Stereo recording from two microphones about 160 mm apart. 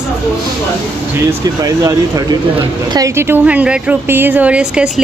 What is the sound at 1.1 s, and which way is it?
Speech, 25° right (ahead or behind).